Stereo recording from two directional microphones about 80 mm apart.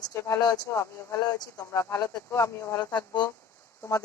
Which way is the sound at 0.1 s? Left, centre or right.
Left.